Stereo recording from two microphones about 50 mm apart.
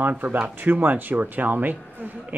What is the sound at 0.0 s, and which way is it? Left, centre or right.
Speech, right.